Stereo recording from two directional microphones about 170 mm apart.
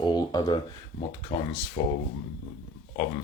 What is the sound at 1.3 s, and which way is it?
Speech, 60° left (ahead or behind).